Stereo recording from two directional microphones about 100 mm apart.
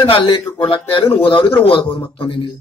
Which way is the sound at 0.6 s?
65° left (ahead or behind).